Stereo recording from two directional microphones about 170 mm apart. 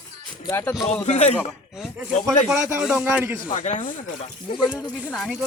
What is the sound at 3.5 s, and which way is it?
Speech, 45° left (ahead or behind).